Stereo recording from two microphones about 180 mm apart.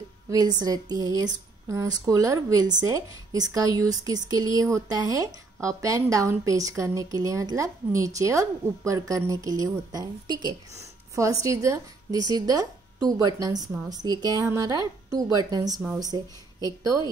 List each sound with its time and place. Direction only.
0.3 s a woman's voice: 20° right (ahead or behind)
15.7 s speech: 10° right (ahead or behind)
16.0 s a woman's voice: 20° right (ahead or behind)